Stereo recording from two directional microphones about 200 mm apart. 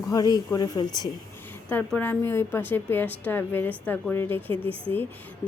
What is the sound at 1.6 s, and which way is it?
A woman's voice, 10° left (ahead or behind).